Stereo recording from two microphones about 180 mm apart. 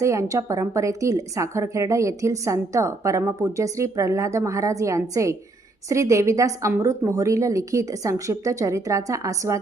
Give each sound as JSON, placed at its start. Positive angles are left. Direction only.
{"t": 0.0, "sound": "speech", "side_deg": -15}